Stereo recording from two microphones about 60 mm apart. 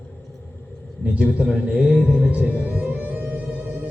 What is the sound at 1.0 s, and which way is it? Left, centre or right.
A man's voice, right.